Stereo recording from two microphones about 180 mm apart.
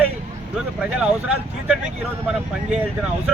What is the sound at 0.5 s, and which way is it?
Speech, 5° right (ahead or behind).